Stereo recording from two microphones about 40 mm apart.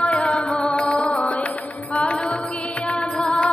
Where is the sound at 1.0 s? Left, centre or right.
Left.